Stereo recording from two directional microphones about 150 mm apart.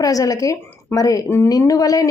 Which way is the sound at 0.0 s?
25° left (ahead or behind).